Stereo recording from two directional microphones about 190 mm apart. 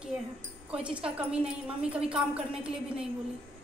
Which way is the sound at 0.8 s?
5° right (ahead or behind).